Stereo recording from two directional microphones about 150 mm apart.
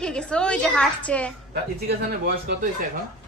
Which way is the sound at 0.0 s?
5° left (ahead or behind).